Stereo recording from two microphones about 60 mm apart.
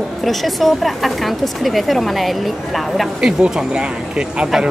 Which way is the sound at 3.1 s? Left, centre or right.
Centre.